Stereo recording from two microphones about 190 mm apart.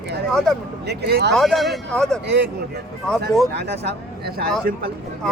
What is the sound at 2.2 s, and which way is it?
Speech, 65° right (ahead or behind).